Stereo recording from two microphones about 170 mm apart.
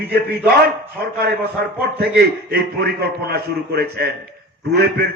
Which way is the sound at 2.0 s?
70° right (ahead or behind).